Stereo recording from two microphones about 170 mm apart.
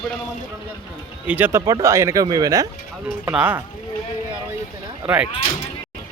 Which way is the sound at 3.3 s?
10° right (ahead or behind).